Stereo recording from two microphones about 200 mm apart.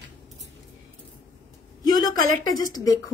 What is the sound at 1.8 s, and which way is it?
A woman's voice, 20° left (ahead or behind).